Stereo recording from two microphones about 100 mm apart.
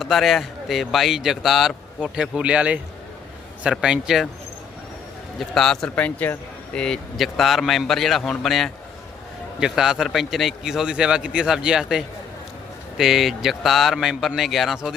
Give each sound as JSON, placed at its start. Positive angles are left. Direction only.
{"t": 0.0, "sound": "a man's voice", "side_deg": 0}
{"t": 5.4, "sound": "a man's voice", "side_deg": 5}